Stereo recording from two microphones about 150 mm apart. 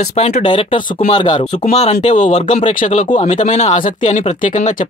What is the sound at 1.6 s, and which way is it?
Speech, 45° left (ahead or behind).